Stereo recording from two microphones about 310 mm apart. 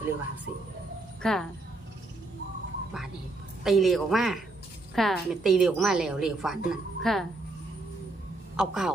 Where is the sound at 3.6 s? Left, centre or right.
Centre.